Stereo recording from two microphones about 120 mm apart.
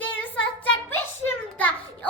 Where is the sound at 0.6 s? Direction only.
15° left (ahead or behind).